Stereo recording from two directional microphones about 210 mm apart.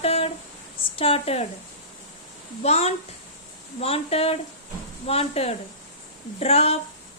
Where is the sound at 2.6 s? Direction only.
30° left (ahead or behind).